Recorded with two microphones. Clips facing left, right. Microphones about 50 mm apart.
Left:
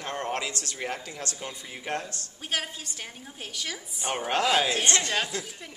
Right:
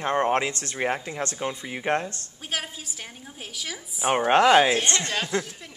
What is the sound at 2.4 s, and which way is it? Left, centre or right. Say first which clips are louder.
A woman's voice: even; centre.